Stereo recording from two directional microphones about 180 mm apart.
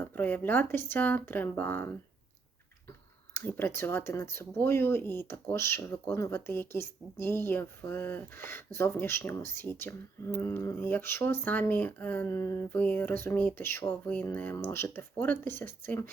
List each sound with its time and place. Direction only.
0.0 s speech: 10° left (ahead or behind)
3.3 s speech: 10° left (ahead or behind)